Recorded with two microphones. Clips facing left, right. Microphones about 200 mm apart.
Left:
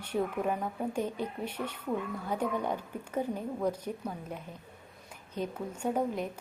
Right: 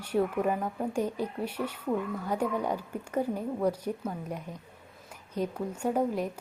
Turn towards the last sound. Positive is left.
turn(degrees=-10)  # may be behind; listen again after turning